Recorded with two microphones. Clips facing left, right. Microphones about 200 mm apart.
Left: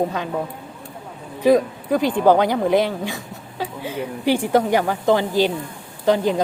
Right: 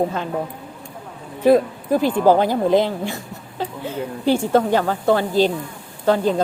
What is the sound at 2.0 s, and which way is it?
Speech, 15° left (ahead or behind).